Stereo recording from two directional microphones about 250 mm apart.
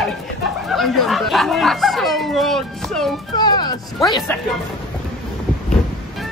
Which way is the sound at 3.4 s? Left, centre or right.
Centre.